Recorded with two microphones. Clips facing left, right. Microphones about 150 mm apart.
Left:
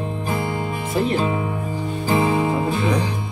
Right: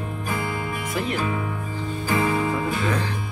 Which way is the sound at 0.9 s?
25° left (ahead or behind).